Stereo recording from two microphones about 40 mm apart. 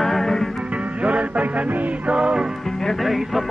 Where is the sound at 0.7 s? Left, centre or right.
Right.